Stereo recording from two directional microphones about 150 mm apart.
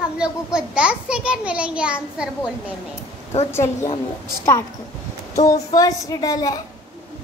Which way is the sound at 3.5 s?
15° left (ahead or behind).